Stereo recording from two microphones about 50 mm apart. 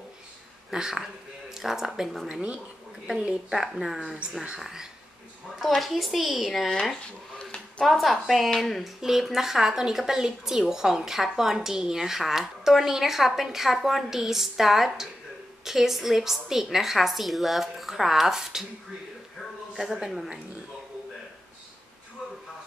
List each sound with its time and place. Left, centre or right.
0.7 s a woman's voice: centre
3.1 s a woman's voice: centre
7.8 s a woman's voice: centre
19.7 s a woman's voice: centre